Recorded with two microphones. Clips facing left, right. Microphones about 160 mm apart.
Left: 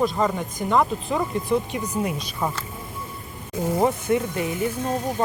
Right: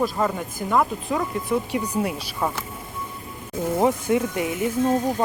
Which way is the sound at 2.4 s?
10° left (ahead or behind).